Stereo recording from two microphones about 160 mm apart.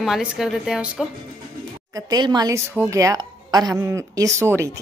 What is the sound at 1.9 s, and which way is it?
Speech, 25° right (ahead or behind).